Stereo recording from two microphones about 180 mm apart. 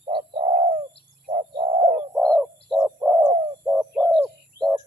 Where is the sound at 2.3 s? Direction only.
5° right (ahead or behind).